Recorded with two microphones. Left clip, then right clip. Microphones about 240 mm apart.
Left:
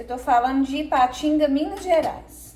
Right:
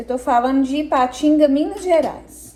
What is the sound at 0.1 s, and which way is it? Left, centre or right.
A woman's voice, centre.